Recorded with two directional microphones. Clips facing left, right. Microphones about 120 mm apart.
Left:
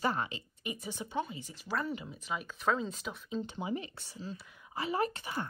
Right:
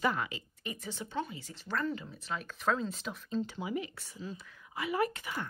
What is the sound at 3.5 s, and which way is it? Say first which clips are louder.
Speech: even; 25° left (ahead or behind).